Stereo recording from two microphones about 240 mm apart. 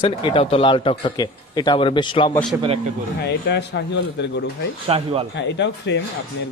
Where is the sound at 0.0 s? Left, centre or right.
Left.